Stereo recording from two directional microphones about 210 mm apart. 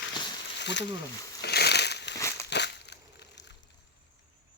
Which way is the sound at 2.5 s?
55° left (ahead or behind).